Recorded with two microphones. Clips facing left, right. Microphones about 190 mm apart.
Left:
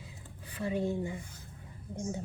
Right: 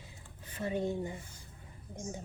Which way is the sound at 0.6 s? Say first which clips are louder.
Left 1 dB; 20° right (ahead or behind).